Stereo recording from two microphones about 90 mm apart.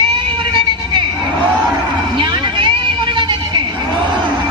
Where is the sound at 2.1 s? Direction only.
65° right (ahead or behind).